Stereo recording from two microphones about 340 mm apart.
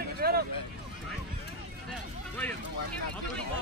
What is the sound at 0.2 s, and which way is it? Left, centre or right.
Vehicle, right.